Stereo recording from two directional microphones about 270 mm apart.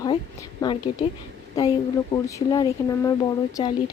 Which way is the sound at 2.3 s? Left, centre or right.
Centre.